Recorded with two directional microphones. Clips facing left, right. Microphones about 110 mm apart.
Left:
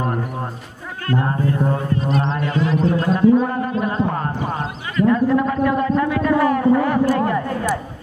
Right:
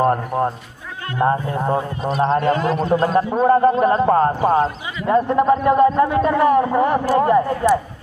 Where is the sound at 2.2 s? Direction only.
45° right (ahead or behind).